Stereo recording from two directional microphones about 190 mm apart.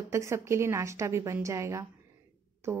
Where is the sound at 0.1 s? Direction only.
15° right (ahead or behind).